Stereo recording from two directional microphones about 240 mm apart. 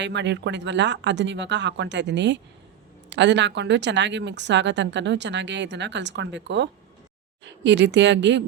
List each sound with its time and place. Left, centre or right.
0.0 s a woman's voice: right